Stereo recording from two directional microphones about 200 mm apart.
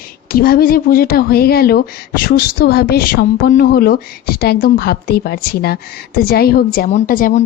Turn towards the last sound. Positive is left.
turn(degrees=45)  # may be behind; listen again after turning